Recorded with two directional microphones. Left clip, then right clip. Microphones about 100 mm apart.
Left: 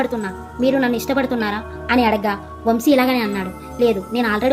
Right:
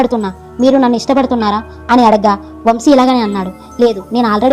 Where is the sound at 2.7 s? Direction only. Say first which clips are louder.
Right 7 dB; 55° right (ahead or behind).